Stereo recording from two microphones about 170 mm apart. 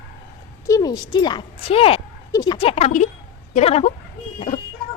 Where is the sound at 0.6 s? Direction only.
20° left (ahead or behind); by 3.9 s 40° left (ahead or behind).